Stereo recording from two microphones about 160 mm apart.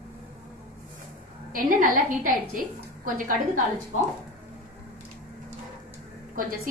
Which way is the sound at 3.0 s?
55° right (ahead or behind).